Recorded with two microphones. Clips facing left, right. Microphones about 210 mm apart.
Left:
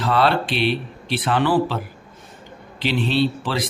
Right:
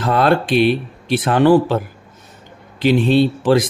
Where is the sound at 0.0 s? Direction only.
45° right (ahead or behind).